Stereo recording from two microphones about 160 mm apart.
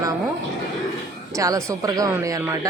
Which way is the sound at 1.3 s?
20° right (ahead or behind).